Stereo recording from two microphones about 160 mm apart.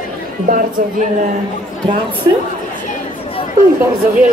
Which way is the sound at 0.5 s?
65° right (ahead or behind).